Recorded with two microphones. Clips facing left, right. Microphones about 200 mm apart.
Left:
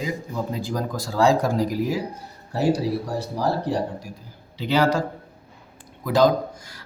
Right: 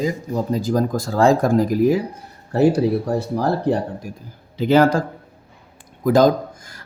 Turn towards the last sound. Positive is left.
turn(degrees=-50)  # may be behind; listen again after turning